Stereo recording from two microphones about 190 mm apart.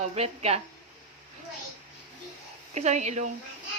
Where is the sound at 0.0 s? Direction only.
35° right (ahead or behind).